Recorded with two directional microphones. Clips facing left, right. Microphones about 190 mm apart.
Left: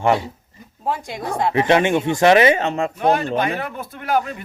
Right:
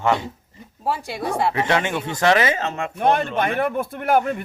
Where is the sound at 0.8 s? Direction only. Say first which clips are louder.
Even; 10° right (ahead or behind).